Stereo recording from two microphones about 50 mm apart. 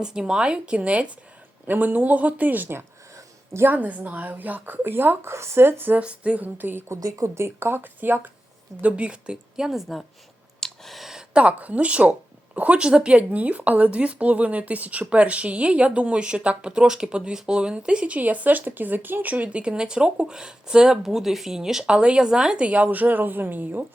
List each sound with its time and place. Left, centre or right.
0.0 s speech: centre; by 2.6 s right
3.7 s speech: right
4.8 s speech: right
5.3 s speech: right
6.0 s speech: right
6.8 s speech: right
8.8 s speech: right
10.6 s a sound: centre
11.2 s speech: right
22.6 s speech: right